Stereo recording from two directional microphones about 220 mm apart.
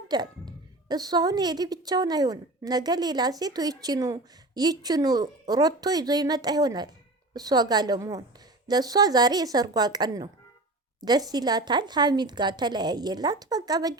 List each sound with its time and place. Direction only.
0.1 s a woman's voice: 20° right (ahead or behind)